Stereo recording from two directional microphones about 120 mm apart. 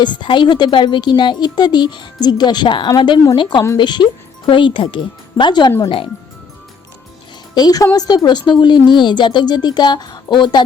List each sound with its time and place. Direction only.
0.0 s a woman's voice: 40° left (ahead or behind)
7.5 s speech: 35° left (ahead or behind)